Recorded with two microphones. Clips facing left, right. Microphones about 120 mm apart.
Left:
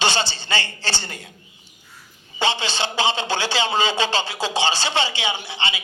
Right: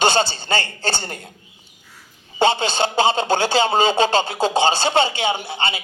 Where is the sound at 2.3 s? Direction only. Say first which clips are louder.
Right 6 dB; 45° right (ahead or behind).